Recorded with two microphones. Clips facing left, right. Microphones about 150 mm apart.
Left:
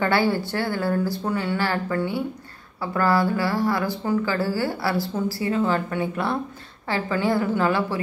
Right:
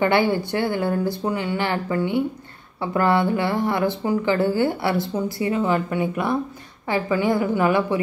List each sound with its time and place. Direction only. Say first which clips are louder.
0.0 s a woman's voice: right 2 dB; 20° right (ahead or behind)